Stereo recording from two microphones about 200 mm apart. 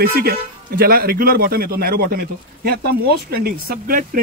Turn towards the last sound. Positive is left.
turn(degrees=-45)  # may be behind; listen again after turning